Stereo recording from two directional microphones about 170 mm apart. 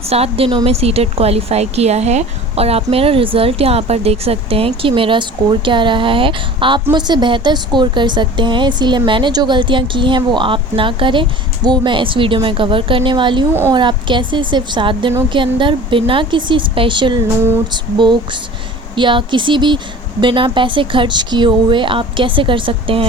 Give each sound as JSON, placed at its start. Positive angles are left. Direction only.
{"t": 0.1, "sound": "a woman's voice", "side_deg": -35}
{"t": 13.5, "sound": "a woman's voice", "side_deg": -15}
{"t": 13.7, "sound": "a woman's voice", "side_deg": -30}